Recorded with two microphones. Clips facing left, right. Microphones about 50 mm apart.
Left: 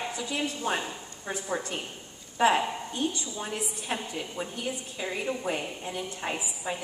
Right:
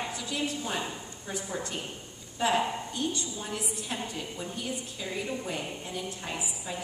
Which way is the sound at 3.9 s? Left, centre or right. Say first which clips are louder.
Left 4 dB; left.